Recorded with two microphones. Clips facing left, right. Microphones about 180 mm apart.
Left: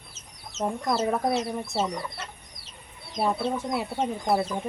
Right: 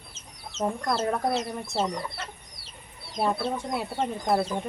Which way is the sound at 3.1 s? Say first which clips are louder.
Left 1 dB; centre (ahead or behind).